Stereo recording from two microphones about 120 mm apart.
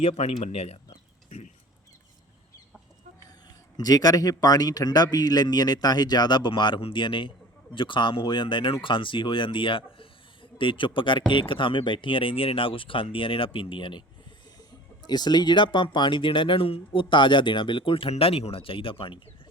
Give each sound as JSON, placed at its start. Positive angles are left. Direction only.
{"t": 0.0, "sound": "speech", "side_deg": 60}
{"t": 3.8, "sound": "speech", "side_deg": 30}
{"t": 15.0, "sound": "speech", "side_deg": 35}